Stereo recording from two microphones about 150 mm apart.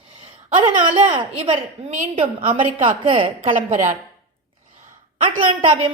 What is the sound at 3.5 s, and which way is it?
Speech, 55° right (ahead or behind).